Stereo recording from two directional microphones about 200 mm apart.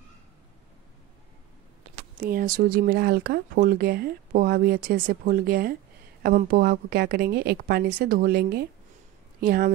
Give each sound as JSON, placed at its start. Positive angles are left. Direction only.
{"t": 2.2, "sound": "speech", "side_deg": -45}